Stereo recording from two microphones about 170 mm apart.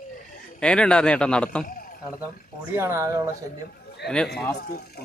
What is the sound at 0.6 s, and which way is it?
Speech, 5° left (ahead or behind).